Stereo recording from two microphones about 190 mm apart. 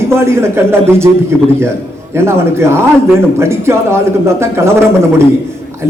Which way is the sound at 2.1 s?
15° right (ahead or behind).